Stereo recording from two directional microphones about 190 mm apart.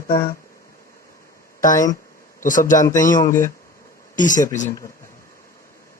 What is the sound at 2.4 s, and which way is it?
Speech, 45° left (ahead or behind).